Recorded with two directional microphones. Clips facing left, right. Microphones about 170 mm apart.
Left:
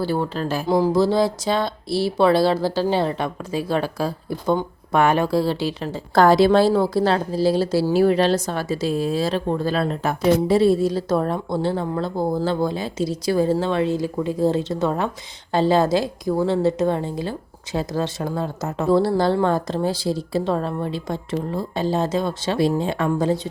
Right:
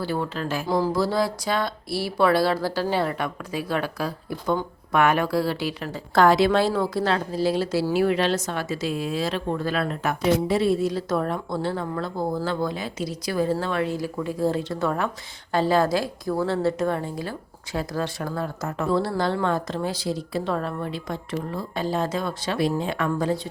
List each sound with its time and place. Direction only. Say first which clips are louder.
0.0 s speech: left 4 dB; 30° left (ahead or behind)
0.7 s speech: left 5 dB; 20° left (ahead or behind)